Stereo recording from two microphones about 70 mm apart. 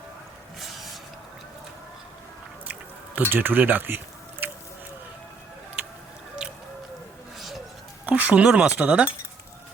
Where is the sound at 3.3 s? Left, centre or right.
Right.